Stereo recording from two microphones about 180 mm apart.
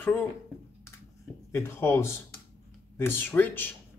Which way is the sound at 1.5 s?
15° left (ahead or behind).